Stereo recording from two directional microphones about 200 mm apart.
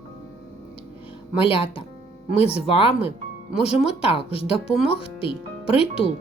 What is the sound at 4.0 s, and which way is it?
Speech, 30° left (ahead or behind).